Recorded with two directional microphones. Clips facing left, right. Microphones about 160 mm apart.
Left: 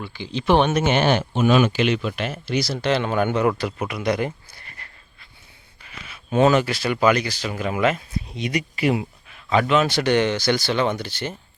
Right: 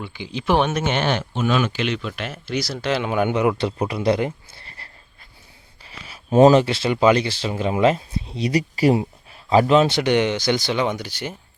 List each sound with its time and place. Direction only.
0.0 s speech: 15° right (ahead or behind)
3.6 s speech: 30° right (ahead or behind)
5.8 s speech: 35° right (ahead or behind)
9.9 s speech: 20° right (ahead or behind)